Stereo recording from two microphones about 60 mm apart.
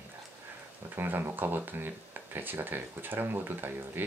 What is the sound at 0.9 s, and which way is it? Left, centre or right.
Speech, right.